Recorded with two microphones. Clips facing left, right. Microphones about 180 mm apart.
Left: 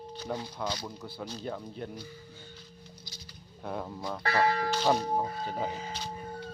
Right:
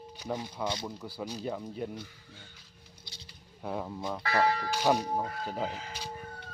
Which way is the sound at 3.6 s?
5° right (ahead or behind).